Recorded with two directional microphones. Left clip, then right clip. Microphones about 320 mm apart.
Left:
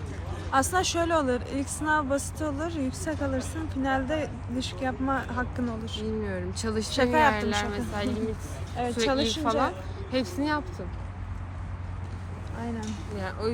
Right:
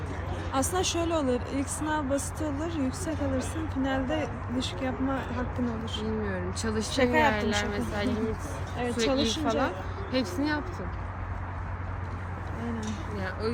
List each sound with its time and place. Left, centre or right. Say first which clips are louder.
0.5 s speech: left 4 dB; centre
12.6 s speech: left 1 dB; centre